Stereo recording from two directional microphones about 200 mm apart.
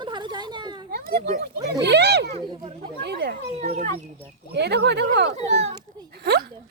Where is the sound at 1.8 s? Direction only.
55° right (ahead or behind).